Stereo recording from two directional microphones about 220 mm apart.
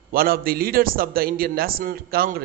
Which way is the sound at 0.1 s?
40° right (ahead or behind).